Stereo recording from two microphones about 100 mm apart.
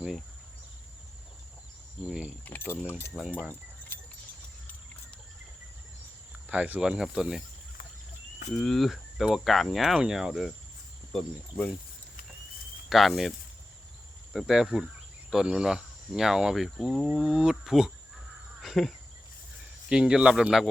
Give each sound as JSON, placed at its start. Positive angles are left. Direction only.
{"t": 2.0, "sound": "speech", "side_deg": -10}
{"t": 2.4, "sound": "speech", "side_deg": 20}
{"t": 3.1, "sound": "speech", "side_deg": -5}
{"t": 6.5, "sound": "speech", "side_deg": -15}
{"t": 8.5, "sound": "speech", "side_deg": 5}
{"t": 12.9, "sound": "speech", "side_deg": 0}
{"t": 14.3, "sound": "speech", "side_deg": -5}